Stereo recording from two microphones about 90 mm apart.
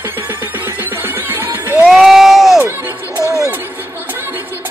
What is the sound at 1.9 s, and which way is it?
Crowd, 5° right (ahead or behind).